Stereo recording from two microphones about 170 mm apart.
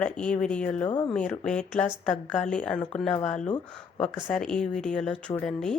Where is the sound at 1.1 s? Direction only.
5° left (ahead or behind).